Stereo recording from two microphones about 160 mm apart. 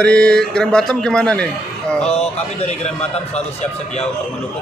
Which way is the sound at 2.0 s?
40° left (ahead or behind).